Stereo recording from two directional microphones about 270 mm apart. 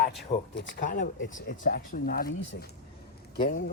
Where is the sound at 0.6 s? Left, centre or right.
Left.